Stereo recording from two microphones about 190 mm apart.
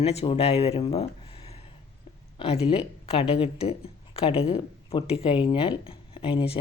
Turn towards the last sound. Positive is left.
turn(degrees=30)  # may be behind; listen again after turning